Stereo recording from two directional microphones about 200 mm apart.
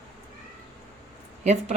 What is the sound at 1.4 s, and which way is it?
Speech, 35° right (ahead or behind).